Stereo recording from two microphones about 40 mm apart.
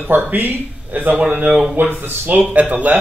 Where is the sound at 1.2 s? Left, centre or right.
Right.